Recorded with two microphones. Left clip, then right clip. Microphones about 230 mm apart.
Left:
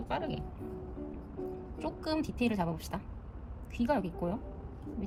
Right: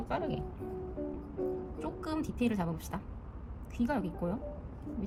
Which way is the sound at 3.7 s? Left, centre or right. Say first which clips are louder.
Left 3 dB; centre.